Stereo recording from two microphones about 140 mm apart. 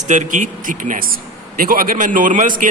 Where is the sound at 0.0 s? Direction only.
60° right (ahead or behind).